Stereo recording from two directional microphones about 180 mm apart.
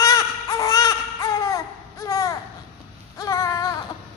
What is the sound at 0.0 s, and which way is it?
Baby cry, 15° left (ahead or behind).